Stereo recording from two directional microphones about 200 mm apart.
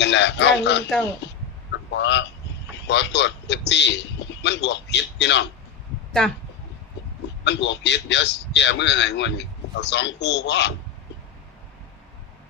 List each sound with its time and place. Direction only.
0.0 s a man's voice: 60° left (ahead or behind)
1.2 s chicken: 60° left (ahead or behind)
1.7 s a sound: 65° left (ahead or behind)
2.8 s a man's voice: 60° left (ahead or behind)
7.4 s a man's voice: 60° left (ahead or behind)